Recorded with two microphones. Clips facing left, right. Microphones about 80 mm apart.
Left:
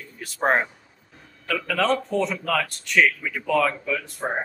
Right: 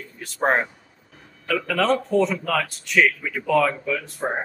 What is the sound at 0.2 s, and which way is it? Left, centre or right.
Speech, centre.